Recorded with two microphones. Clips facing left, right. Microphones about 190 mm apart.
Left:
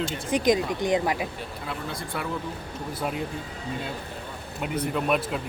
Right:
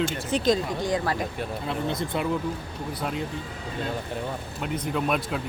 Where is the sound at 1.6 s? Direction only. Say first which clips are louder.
Right 5 dB; 20° right (ahead or behind).